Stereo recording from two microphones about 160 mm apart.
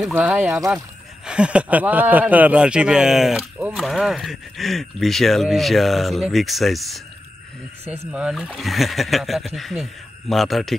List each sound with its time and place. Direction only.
0.1 s speech: 10° right (ahead or behind)